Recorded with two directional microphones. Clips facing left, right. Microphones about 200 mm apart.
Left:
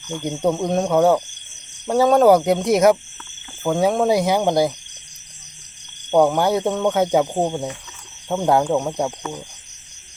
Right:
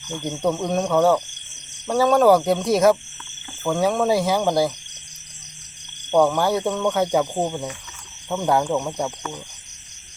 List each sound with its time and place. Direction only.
0.3 s speech: 20° left (ahead or behind)
6.1 s speech: 15° left (ahead or behind)